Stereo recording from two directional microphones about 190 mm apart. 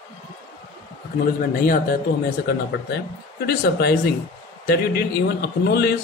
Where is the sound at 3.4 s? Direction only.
55° left (ahead or behind).